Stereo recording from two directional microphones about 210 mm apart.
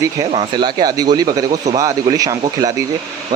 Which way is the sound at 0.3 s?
20° right (ahead or behind).